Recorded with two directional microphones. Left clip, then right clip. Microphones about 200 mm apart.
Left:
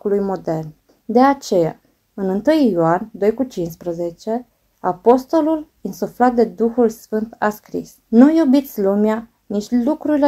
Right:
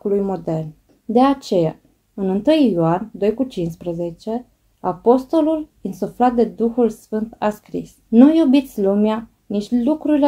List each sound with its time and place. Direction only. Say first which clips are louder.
0.0 s speech: left 1 dB; 20° left (ahead or behind)